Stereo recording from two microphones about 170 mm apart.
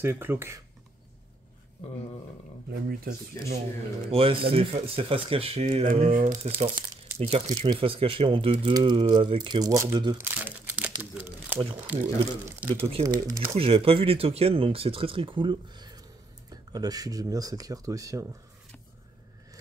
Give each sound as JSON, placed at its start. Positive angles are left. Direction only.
{"t": 0.0, "sound": "speech", "side_deg": -15}
{"t": 2.7, "sound": "speech", "side_deg": -65}
{"t": 4.1, "sound": "speech", "side_deg": -35}
{"t": 6.1, "sound": "speech", "side_deg": -50}
{"t": 10.1, "sound": "speech", "side_deg": -10}
{"t": 13.6, "sound": "speech", "side_deg": -35}